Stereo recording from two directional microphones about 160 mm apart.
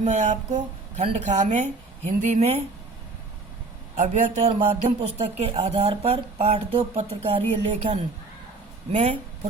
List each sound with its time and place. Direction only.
0.0 s speech: 50° right (ahead or behind)
3.9 s speech: 50° right (ahead or behind)